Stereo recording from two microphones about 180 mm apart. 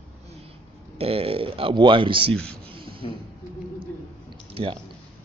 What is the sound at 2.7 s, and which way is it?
Beatboxing, 30° right (ahead or behind).